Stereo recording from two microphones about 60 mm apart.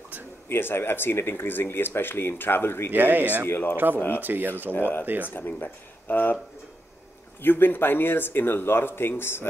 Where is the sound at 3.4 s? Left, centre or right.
Left.